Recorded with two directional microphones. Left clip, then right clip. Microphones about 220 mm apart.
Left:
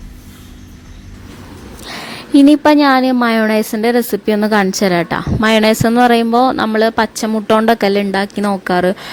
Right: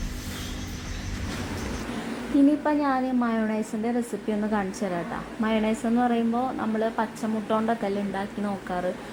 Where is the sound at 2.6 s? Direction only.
55° left (ahead or behind).